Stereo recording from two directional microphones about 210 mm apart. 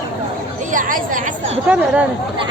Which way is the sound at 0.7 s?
40° right (ahead or behind).